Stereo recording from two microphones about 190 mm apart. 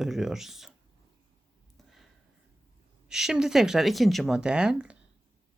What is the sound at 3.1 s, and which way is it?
Speech, 5° right (ahead or behind).